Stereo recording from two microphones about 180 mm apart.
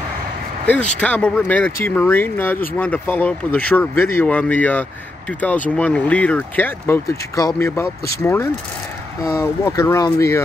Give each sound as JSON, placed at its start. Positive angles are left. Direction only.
{"t": 1.0, "sound": "speech", "side_deg": 10}